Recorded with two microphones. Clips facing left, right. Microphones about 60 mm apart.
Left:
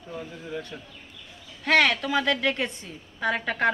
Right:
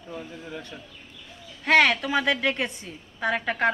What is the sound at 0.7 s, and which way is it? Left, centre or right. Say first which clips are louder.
Speech: left 1 dB; centre.